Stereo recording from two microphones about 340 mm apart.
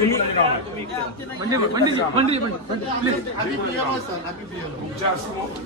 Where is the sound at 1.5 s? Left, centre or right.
Centre.